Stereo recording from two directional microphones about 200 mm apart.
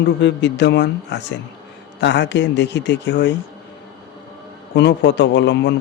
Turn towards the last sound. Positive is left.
turn(degrees=60)  # may be behind; listen again after turning